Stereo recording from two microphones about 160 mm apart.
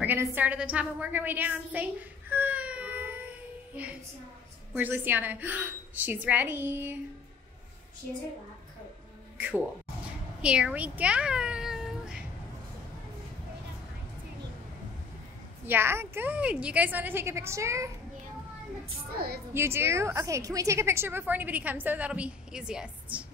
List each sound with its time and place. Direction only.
0.0 s a woman's voice: 10° right (ahead or behind)
10.4 s speech: 5° right (ahead or behind)
15.6 s a woman's voice: 15° right (ahead or behind)
19.1 s a woman's voice: 75° right (ahead or behind)
19.5 s a woman's voice: 15° right (ahead or behind)